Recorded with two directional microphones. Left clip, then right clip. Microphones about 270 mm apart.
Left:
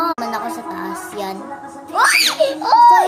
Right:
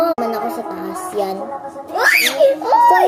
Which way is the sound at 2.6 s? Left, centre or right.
Left.